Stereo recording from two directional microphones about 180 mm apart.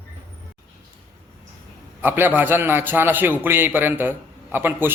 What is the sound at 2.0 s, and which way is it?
A man's voice, 10° right (ahead or behind).